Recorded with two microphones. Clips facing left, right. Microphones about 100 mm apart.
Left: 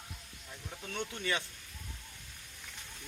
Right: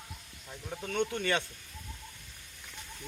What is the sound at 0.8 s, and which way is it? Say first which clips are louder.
Speech: right 7 dB; 50° right (ahead or behind).